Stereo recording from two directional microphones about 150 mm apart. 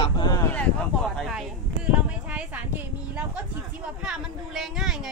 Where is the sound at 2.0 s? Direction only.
10° right (ahead or behind).